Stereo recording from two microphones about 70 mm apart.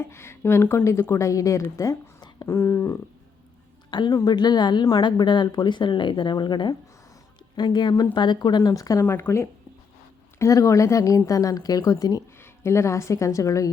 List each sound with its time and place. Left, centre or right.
0.0 s speech: left
1.1 s a woman's voice: left
3.9 s a woman's voice: left
8.7 s a woman's voice: left
9.0 s a woman's voice: left
12.4 s a woman's voice: left